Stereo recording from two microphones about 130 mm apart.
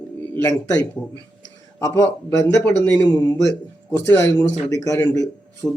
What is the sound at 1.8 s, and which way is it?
Speech, 25° left (ahead or behind).